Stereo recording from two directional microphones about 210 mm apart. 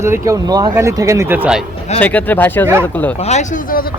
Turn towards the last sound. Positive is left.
turn(degrees=40)  # may be behind; listen again after turning